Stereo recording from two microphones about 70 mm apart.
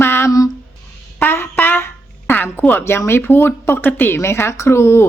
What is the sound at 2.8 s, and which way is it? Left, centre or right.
Speech, left.